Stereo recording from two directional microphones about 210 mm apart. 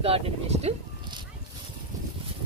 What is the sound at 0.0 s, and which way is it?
Speech, 30° right (ahead or behind).